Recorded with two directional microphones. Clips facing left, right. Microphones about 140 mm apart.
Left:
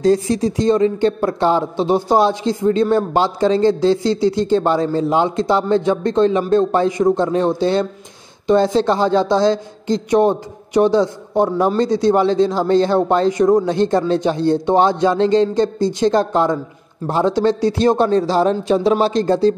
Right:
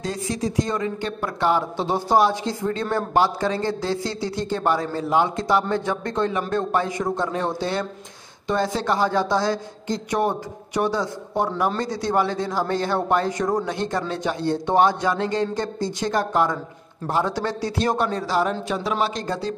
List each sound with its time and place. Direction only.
0.0 s speech: 35° left (ahead or behind)
13.3 s a man's voice: 15° left (ahead or behind)
13.7 s speech: 30° left (ahead or behind)